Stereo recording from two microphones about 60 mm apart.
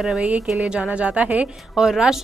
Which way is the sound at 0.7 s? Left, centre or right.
Centre.